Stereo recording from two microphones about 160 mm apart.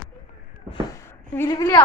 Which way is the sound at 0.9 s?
15° left (ahead or behind).